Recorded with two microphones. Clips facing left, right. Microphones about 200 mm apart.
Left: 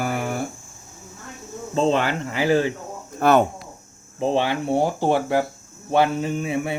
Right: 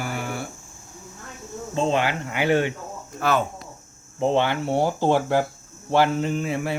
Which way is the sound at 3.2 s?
60° left (ahead or behind).